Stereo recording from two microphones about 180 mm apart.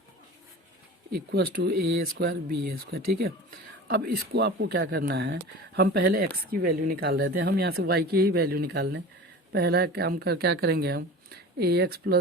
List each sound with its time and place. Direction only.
1.1 s speech: 60° right (ahead or behind)